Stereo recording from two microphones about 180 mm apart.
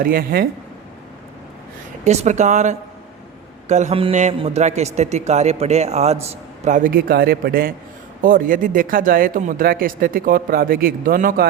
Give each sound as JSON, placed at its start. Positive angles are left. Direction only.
{"t": 0.0, "sound": "speech", "side_deg": -55}
{"t": 2.0, "sound": "a man's voice", "side_deg": -40}